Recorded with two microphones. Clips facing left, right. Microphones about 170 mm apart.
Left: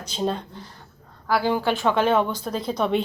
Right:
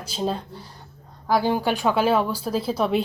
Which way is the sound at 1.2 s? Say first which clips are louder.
Right 1 dB; 15° right (ahead or behind).